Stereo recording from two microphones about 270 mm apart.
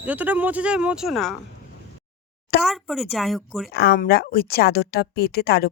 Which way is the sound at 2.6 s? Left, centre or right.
Centre.